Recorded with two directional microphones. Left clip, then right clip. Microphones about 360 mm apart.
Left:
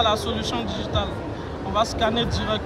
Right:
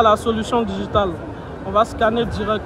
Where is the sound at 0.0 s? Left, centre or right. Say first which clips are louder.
Right 6 dB; centre.